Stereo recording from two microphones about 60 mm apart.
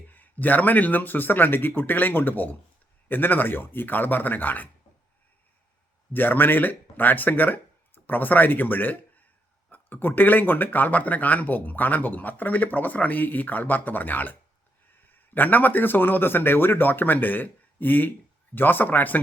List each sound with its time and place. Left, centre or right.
0.1 s a man's voice: left
6.1 s a man's voice: left